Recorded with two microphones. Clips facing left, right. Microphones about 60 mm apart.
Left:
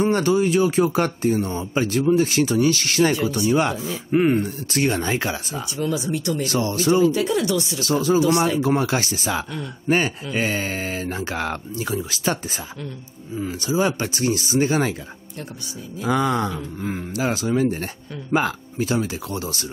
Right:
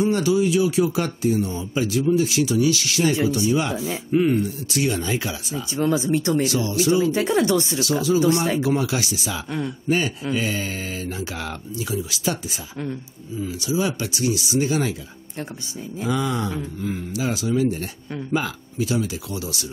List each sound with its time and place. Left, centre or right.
0.0 s speech: left
5.8 s speech: right
6.4 s speech: left
7.1 s speech: right
7.8 s speech: left
13.4 s speech: left
16.0 s speech: left